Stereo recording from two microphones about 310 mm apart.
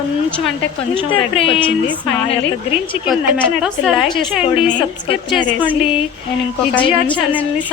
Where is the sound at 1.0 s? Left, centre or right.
Centre.